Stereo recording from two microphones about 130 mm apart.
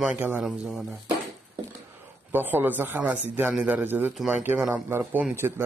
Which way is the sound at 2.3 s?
15° right (ahead or behind).